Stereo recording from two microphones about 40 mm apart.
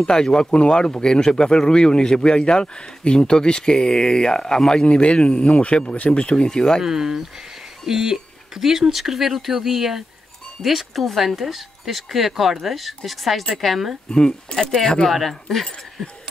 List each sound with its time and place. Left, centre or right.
0.0 s speech: centre; by 6.2 s left
6.2 s speech: centre
6.8 s speech: centre
14.1 s speech: centre